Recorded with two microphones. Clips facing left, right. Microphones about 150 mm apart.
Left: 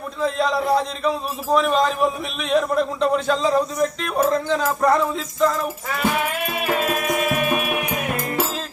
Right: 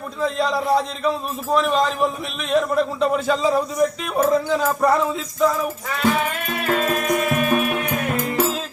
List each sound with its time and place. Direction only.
0.2 s a man's voice: centre (ahead or behind)
6.2 s music: 10° left (ahead or behind)